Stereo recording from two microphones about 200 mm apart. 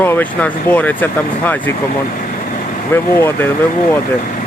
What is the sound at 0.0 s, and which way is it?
Speech, 10° left (ahead or behind).